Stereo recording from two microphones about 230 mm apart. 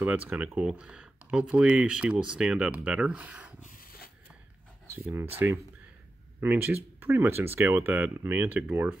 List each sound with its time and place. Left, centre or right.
0.3 s speech: centre
3.6 s a sound: left
5.4 s speech: centre